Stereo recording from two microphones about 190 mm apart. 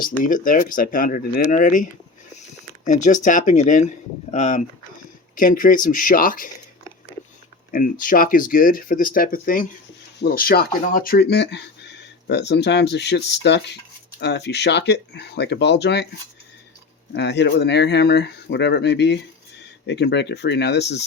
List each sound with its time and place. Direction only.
0.0 s speech: 45° left (ahead or behind)
7.7 s speech: 45° left (ahead or behind); by 16.0 s 60° left (ahead or behind)
17.2 s speech: 65° left (ahead or behind)